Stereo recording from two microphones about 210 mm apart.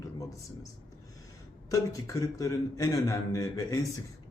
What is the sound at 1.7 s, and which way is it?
A man's voice, 15° left (ahead or behind).